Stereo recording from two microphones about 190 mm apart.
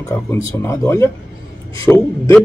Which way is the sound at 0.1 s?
15° left (ahead or behind).